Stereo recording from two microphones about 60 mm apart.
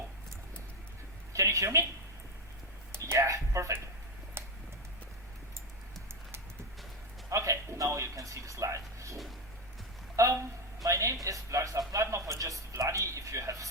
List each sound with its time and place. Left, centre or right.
1.3 s a woman's voice: right
3.1 s speech: right
4.4 s a sound: right
7.3 s speech: right
10.2 s speech: right